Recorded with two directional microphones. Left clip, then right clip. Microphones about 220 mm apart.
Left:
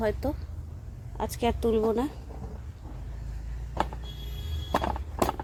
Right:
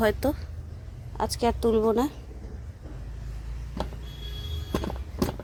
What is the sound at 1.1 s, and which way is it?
Speech, 5° right (ahead or behind).